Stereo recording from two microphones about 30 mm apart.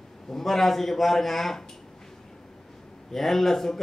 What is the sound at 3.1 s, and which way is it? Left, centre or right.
Speech, centre.